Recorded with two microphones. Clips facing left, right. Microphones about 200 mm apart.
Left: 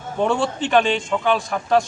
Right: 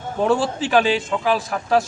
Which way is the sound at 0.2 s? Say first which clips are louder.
Right 1 dB; centre (ahead or behind).